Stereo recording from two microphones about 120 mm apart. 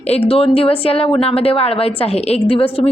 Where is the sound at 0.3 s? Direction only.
55° left (ahead or behind).